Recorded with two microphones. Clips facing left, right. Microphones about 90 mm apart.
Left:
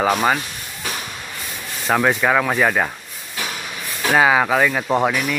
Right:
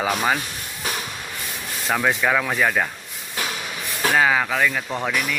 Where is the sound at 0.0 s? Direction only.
20° left (ahead or behind).